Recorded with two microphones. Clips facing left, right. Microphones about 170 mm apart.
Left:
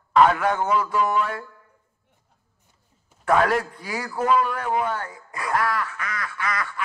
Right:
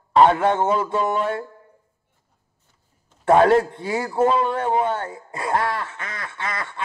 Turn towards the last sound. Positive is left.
turn(degrees=-25)  # may be behind; listen again after turning